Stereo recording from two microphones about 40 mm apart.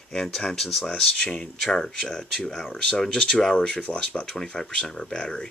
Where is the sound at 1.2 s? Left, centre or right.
Centre.